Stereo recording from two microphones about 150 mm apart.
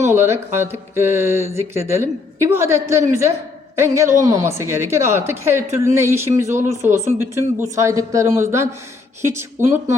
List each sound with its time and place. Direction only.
0.1 s a woman's voice: 15° right (ahead or behind)